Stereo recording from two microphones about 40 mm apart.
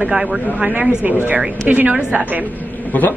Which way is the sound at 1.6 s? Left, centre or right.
Right.